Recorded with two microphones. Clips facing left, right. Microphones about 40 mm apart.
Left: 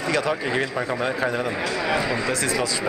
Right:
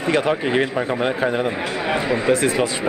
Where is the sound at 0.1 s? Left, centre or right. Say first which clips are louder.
Right 5 dB; right.